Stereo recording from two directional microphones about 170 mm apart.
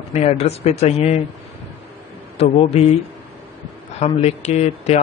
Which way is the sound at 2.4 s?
35° left (ahead or behind).